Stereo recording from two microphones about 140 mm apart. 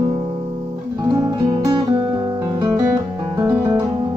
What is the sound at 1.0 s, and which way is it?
Music, 25° right (ahead or behind).